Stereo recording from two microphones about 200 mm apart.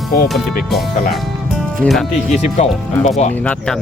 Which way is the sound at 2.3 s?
35° left (ahead or behind).